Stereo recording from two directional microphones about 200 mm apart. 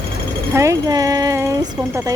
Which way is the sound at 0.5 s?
15° right (ahead or behind).